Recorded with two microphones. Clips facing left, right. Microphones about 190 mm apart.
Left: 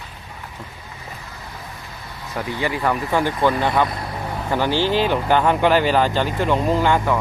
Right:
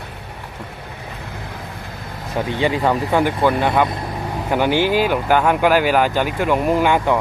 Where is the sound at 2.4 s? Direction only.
25° right (ahead or behind).